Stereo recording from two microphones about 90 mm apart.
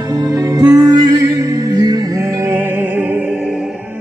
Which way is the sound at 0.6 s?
50° right (ahead or behind).